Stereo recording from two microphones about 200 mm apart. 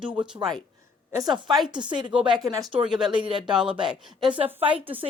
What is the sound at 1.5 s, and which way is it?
Speech, centre (ahead or behind).